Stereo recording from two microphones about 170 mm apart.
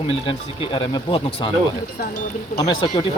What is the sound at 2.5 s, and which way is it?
Speech, 25° left (ahead or behind).